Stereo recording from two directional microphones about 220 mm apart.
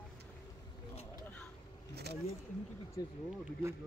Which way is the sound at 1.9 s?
50° right (ahead or behind).